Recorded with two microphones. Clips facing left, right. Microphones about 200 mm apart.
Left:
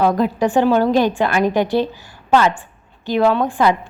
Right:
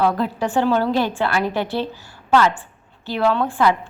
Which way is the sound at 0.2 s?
15° left (ahead or behind).